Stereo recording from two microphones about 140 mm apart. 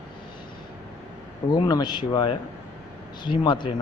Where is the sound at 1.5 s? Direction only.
30° left (ahead or behind).